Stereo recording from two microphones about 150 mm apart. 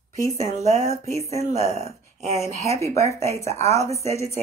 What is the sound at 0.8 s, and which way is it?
Speech, 20° left (ahead or behind).